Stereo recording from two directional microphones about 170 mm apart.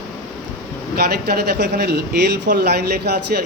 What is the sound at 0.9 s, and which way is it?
Speech, 65° right (ahead or behind).